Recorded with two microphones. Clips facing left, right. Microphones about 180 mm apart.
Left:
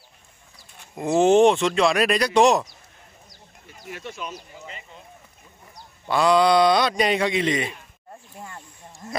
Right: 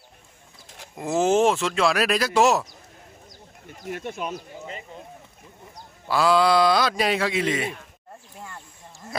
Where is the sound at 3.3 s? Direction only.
50° right (ahead or behind).